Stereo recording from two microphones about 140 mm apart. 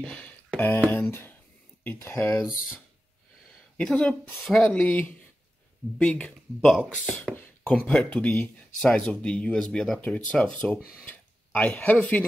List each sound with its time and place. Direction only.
0.0 s a sound: 10° left (ahead or behind)
0.9 s speech: 15° left (ahead or behind)
3.7 s speech: 5° left (ahead or behind)